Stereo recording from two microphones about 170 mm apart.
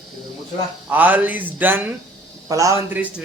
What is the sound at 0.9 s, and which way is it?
Speech, 10° right (ahead or behind).